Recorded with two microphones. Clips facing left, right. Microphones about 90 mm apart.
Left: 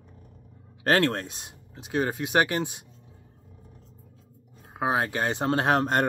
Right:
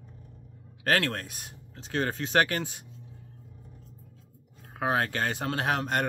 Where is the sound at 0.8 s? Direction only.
30° left (ahead or behind).